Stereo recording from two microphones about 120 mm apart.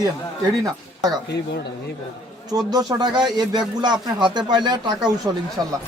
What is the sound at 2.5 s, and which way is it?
Speech, 35° right (ahead or behind).